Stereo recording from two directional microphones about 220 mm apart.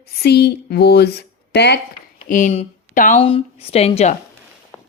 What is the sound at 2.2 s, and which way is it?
A woman's voice, 35° left (ahead or behind).